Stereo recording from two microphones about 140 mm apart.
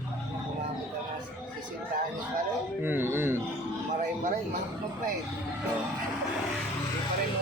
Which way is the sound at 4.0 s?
65° right (ahead or behind).